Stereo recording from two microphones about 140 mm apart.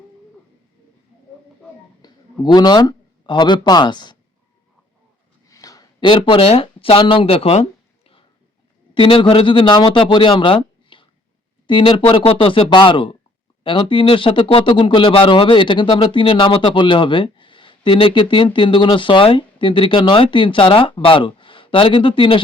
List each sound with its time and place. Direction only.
2.0 s speech: 30° left (ahead or behind)
5.5 s a sound: 25° left (ahead or behind); by 8.2 s 45° left (ahead or behind)
9.0 s speech: 40° left (ahead or behind)